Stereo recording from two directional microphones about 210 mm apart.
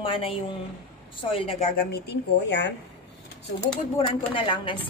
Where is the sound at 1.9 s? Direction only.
55° left (ahead or behind).